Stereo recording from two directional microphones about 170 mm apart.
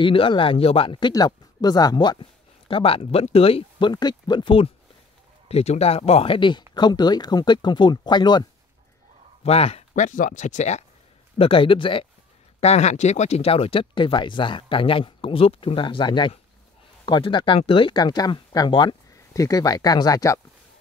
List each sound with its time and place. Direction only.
0.0 s speech: 30° left (ahead or behind)
9.4 s speech: 35° left (ahead or behind)
11.3 s speech: 30° left (ahead or behind)